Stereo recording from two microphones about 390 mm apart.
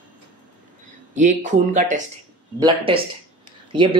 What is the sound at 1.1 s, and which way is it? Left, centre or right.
Speech, centre.